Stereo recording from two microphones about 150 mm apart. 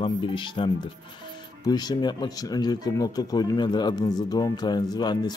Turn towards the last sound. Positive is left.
turn(degrees=30)  # may be behind; listen again after turning